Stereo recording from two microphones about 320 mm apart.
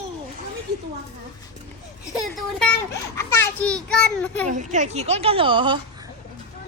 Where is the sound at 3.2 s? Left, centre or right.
Centre.